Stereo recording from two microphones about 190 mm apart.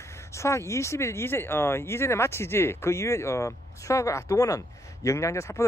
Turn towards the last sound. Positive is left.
turn(degrees=15)  # may be behind; listen again after turning